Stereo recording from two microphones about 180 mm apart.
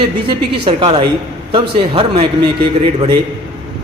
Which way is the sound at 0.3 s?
30° right (ahead or behind).